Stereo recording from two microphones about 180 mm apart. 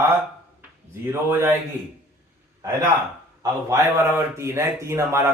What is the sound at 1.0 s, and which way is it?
Speech, 15° right (ahead or behind).